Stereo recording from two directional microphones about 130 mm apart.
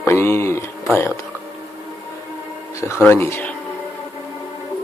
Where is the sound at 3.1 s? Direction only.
20° left (ahead or behind).